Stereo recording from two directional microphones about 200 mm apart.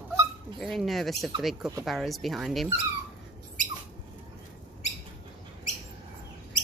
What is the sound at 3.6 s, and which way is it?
Rodents, 40° right (ahead or behind).